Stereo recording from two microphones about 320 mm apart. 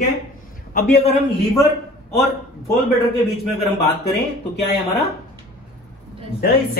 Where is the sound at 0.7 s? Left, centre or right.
Left.